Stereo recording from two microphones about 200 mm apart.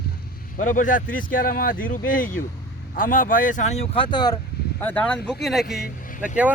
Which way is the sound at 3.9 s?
25° left (ahead or behind).